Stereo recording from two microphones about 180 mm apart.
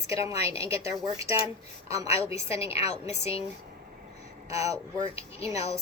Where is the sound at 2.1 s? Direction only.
35° left (ahead or behind).